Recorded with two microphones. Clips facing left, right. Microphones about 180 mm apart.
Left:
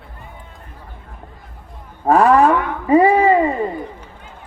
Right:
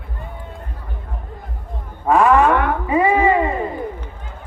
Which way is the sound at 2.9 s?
35° left (ahead or behind).